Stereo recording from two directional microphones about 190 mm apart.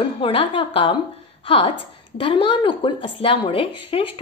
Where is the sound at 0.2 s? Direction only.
30° left (ahead or behind).